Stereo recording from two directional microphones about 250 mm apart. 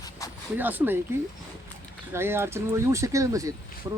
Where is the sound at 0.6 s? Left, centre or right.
Centre.